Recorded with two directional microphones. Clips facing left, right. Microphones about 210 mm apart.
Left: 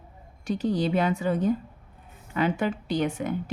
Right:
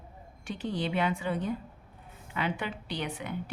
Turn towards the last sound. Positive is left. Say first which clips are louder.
# left 9 dB
turn(degrees=45)  # may be behind; listen again after turning